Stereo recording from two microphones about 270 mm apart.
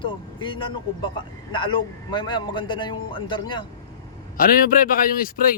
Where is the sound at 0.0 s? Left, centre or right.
Centre.